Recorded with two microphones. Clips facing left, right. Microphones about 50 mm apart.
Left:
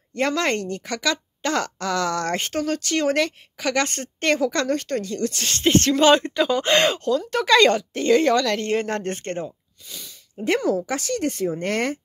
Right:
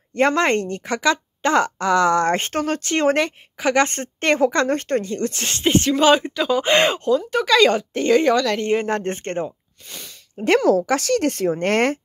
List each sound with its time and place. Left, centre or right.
0.1 s speech: right; by 6.6 s centre
6.6 s speech: centre
7.3 s speech: centre
8.1 s speech: centre; by 9.5 s right
9.8 s speech: right